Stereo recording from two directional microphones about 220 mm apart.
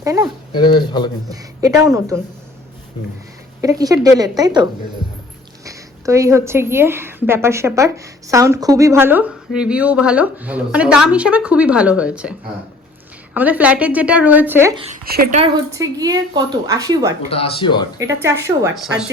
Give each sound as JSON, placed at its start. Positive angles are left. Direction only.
{"t": 0.0, "sound": "speech", "side_deg": -15}
{"t": 0.5, "sound": "speech", "side_deg": 20}
{"t": 1.3, "sound": "a woman's voice", "side_deg": -15}
{"t": 3.6, "sound": "a woman's voice", "side_deg": -15}
{"t": 15.0, "sound": "speech", "side_deg": -45}
{"t": 15.4, "sound": "a woman's voice", "side_deg": -15}
{"t": 17.2, "sound": "speech", "side_deg": 25}
{"t": 18.0, "sound": "a woman's voice", "side_deg": -15}